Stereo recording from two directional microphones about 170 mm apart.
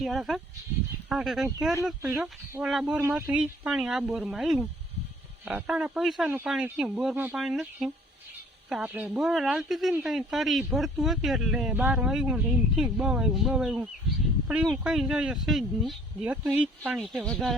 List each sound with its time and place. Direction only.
0.0 s speech: centre (ahead or behind)
2.0 s speech: 15° right (ahead or behind)
2.6 s speech: 5° right (ahead or behind)